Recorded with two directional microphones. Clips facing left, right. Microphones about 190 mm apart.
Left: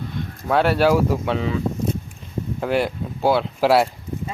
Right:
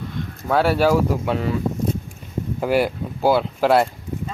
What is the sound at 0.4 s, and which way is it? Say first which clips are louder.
Speech: even; 5° right (ahead or behind).